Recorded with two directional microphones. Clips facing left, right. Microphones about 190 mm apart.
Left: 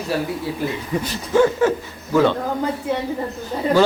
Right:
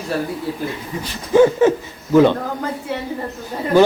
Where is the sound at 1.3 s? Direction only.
15° right (ahead or behind).